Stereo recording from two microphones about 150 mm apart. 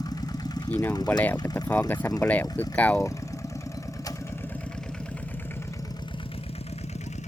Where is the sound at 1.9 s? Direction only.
15° left (ahead or behind).